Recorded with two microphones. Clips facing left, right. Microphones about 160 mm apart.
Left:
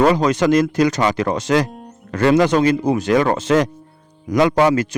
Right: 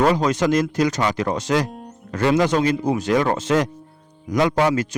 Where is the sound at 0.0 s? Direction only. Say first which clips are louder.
Left 3 dB; 75° left (ahead or behind).